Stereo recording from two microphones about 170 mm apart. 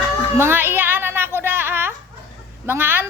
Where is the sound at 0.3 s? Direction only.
10° right (ahead or behind).